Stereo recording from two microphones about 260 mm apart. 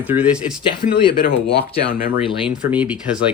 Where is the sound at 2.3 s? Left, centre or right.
Centre.